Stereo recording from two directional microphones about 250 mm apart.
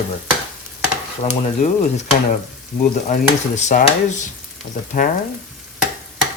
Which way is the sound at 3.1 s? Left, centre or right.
Left.